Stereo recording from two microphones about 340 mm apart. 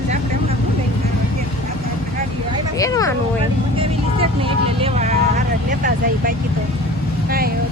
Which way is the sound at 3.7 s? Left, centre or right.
Centre.